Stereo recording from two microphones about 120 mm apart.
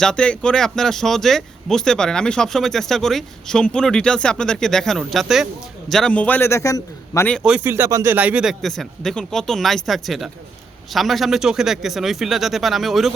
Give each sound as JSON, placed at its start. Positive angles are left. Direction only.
{"t": 0.0, "sound": "a man's voice", "side_deg": 5}
{"t": 7.4, "sound": "speech", "side_deg": -15}
{"t": 7.9, "sound": "speech", "side_deg": -30}
{"t": 8.1, "sound": "speech", "side_deg": -10}